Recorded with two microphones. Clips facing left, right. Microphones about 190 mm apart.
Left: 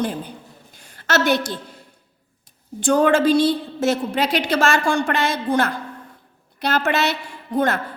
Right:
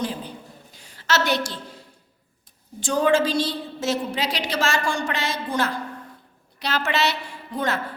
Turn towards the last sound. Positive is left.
turn(degrees=55)  # may be behind; listen again after turning